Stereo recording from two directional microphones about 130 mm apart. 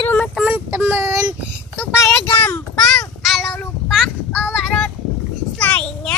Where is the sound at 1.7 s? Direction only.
20° left (ahead or behind).